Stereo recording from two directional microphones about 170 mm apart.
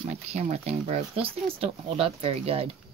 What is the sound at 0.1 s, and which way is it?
Speech, 40° right (ahead or behind).